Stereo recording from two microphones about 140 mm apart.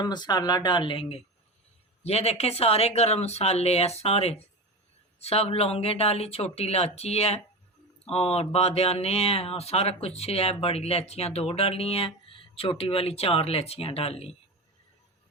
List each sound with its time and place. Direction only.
0.0 s speech: 30° left (ahead or behind)